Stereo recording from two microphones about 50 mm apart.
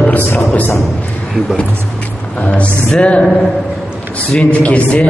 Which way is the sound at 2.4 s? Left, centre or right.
Left.